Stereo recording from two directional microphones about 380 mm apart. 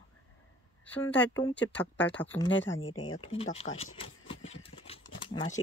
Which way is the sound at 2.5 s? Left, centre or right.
Left.